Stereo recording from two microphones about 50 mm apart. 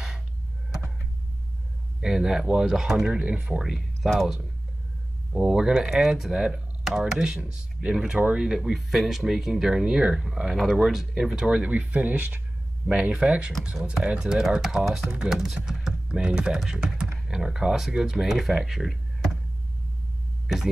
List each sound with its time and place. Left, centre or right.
2.0 s speech: centre
3.1 s speech: right
3.5 s speech: centre
5.3 s speech: centre
11.3 s speech: centre
12.8 s speech: right; by 18.9 s centre
20.4 s speech: centre